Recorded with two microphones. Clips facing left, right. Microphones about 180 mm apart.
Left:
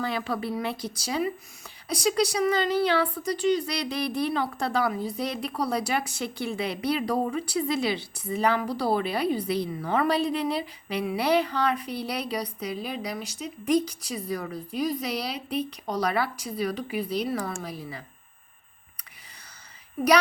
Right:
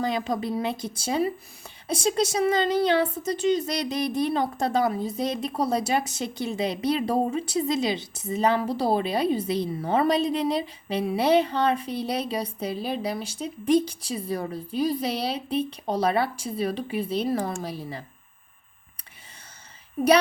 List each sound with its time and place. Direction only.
0.0 s speech: 20° right (ahead or behind)